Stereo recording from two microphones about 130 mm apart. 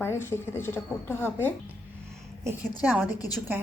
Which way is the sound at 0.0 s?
20° left (ahead or behind).